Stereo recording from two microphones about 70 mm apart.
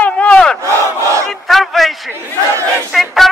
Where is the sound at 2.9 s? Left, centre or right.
Centre.